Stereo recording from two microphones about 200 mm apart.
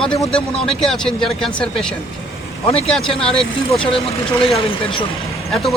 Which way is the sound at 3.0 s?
30° left (ahead or behind).